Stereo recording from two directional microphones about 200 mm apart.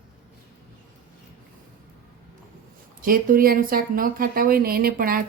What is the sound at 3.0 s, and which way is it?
Speech, 45° right (ahead or behind).